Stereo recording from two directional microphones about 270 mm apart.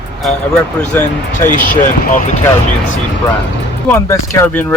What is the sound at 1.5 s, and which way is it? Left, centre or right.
Speech, left.